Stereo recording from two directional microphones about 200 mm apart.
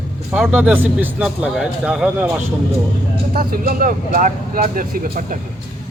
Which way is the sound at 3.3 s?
45° right (ahead or behind).